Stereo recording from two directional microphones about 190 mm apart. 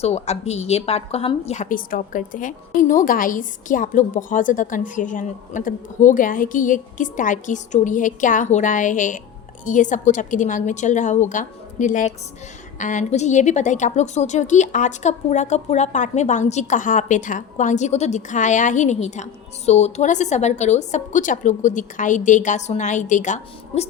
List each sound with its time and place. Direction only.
0.0 s a woman's voice: 35° left (ahead or behind)